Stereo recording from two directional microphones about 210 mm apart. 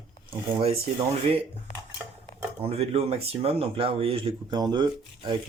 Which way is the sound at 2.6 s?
30° right (ahead or behind).